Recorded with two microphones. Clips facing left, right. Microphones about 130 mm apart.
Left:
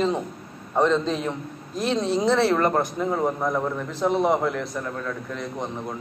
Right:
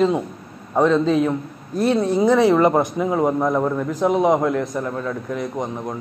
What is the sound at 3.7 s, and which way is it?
A man's voice, 10° right (ahead or behind).